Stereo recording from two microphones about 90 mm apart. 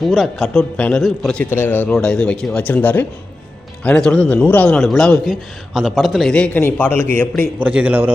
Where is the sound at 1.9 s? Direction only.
5° left (ahead or behind).